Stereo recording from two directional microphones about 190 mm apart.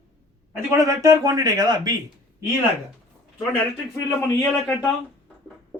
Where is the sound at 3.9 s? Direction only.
15° left (ahead or behind).